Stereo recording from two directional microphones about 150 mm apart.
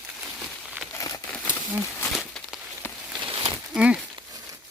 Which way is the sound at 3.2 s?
35° right (ahead or behind).